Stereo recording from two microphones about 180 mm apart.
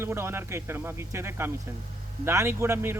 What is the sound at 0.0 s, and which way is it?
Speech, 15° right (ahead or behind).